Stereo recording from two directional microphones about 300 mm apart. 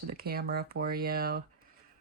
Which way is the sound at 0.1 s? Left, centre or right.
Right.